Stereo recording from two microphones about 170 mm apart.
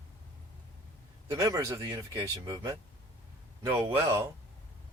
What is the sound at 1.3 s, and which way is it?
Speech, 20° right (ahead or behind).